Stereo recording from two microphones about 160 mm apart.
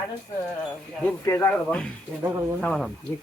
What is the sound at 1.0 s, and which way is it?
Speech, 15° left (ahead or behind).